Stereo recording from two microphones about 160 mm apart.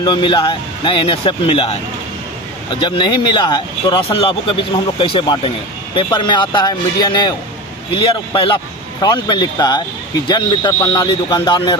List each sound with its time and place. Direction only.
0.0 s speech: 30° left (ahead or behind)